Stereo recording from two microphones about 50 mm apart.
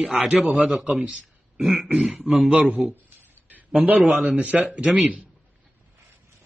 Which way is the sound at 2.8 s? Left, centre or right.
Centre.